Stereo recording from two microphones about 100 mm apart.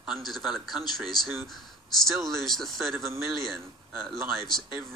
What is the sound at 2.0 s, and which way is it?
Speech, centre (ahead or behind).